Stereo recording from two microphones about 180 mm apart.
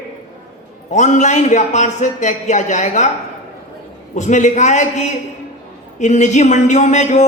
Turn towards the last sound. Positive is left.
turn(degrees=40)  # may be behind; listen again after turning